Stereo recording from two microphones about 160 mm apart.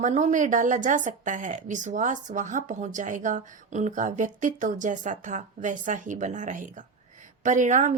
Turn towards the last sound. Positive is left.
turn(degrees=-50)  # may be behind; listen again after turning